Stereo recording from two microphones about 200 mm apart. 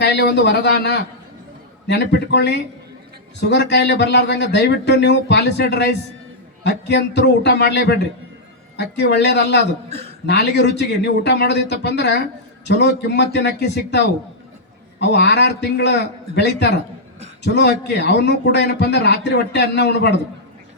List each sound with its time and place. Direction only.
0.0 s a man's voice: 55° left (ahead or behind)